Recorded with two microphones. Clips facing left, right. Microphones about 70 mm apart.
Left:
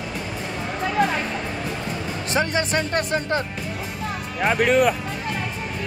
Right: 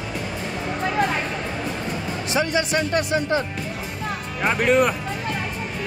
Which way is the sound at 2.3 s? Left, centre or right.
Left.